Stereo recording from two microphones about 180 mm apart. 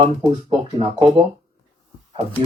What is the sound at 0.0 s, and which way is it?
Speech, 35° right (ahead or behind).